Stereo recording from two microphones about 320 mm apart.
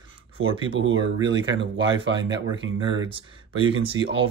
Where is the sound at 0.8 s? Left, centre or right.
Right.